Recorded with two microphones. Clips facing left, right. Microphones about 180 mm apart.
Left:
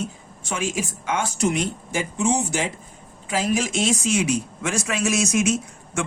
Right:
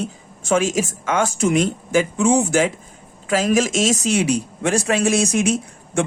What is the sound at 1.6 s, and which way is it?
Speech, 90° right.